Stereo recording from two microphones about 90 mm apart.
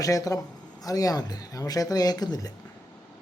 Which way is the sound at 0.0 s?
40° left (ahead or behind).